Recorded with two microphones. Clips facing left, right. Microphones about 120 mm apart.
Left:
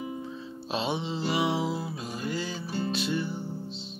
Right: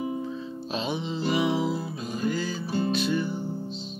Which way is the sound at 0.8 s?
30° left (ahead or behind).